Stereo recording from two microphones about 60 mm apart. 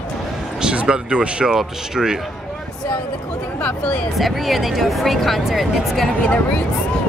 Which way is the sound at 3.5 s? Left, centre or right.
Centre.